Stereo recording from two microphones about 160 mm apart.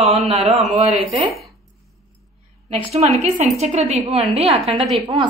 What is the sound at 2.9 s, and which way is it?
A woman's voice, 40° right (ahead or behind).